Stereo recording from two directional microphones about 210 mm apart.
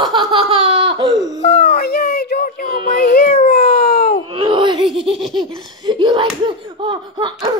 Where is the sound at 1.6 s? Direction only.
50° left (ahead or behind).